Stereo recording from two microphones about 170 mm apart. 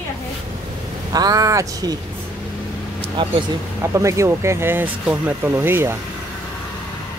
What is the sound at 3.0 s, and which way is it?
Speech, 30° right (ahead or behind).